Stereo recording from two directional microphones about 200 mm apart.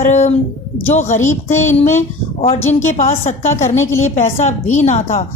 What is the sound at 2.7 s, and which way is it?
A woman's voice, 40° left (ahead or behind).